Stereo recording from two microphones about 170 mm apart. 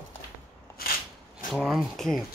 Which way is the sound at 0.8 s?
60° left (ahead or behind).